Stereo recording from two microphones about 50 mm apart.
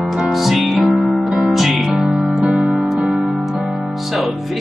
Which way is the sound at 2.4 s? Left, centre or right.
Centre.